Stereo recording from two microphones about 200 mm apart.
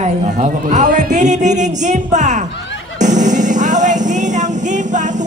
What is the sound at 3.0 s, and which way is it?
Music, 40° right (ahead or behind).